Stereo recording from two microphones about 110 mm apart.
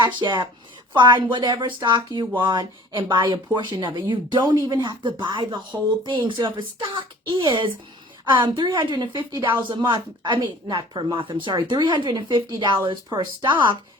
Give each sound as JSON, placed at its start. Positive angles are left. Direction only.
{"t": 0.0, "sound": "speech", "side_deg": -45}